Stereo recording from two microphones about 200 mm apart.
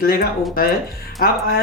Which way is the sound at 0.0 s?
45° left (ahead or behind).